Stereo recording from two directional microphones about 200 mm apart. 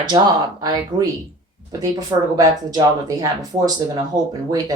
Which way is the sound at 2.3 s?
20° right (ahead or behind).